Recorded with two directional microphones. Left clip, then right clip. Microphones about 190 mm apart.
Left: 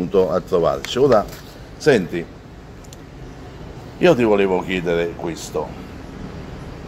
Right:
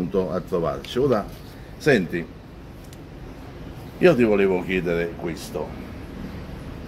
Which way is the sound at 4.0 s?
10° left (ahead or behind).